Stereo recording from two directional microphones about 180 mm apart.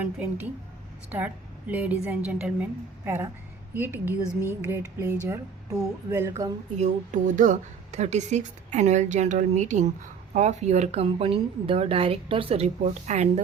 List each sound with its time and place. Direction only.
0.0 s a woman's voice: 10° right (ahead or behind)
6.7 s speech: 45° right (ahead or behind)